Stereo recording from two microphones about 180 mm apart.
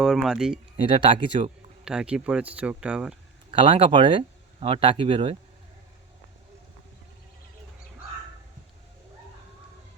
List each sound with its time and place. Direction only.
0.0 s speech: 5° right (ahead or behind)
0.9 s speech: 25° right (ahead or behind)
1.8 s speech: 5° right (ahead or behind)
3.5 s speech: 30° right (ahead or behind)